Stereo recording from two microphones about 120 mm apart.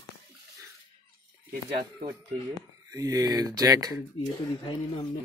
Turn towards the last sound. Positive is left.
turn(degrees=-30)  # may be behind; listen again after turning